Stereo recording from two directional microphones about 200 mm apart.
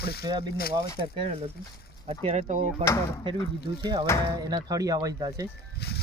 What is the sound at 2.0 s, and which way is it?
Speech, 30° right (ahead or behind).